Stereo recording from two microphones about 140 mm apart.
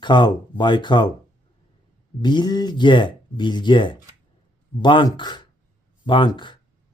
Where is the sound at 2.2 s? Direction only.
30° left (ahead or behind).